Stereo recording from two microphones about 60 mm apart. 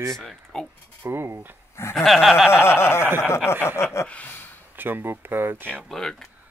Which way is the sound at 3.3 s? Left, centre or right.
Left.